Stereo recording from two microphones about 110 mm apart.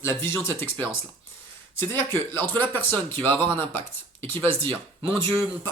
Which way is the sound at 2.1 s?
20° left (ahead or behind).